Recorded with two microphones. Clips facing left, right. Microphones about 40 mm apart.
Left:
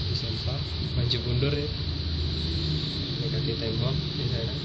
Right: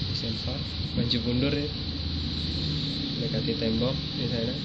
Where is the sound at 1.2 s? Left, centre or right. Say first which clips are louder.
Right 2 dB; centre.